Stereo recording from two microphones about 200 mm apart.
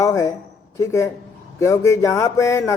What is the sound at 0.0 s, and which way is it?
A man's voice, 15° left (ahead or behind).